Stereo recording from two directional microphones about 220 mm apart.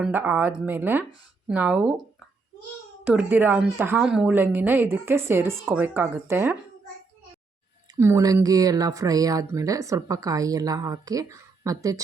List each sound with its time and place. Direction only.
0.0 s speech: 10° right (ahead or behind)
3.0 s speech: 10° right (ahead or behind)
7.9 s speech: 10° right (ahead or behind)